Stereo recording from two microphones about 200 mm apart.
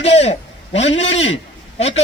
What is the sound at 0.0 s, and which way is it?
A man's voice, 30° left (ahead or behind).